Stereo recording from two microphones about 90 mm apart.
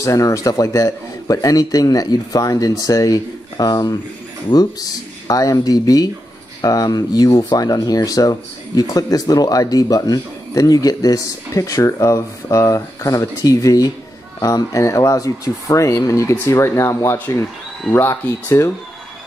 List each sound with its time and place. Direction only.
0.0 s a man's voice: 35° left (ahead or behind)